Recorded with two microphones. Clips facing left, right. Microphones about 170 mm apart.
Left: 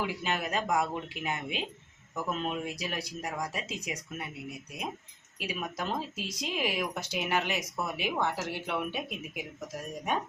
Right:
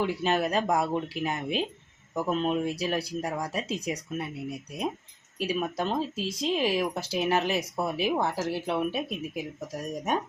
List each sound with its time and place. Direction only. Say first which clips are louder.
0.2 s speech: right 6 dB; 35° right (ahead or behind)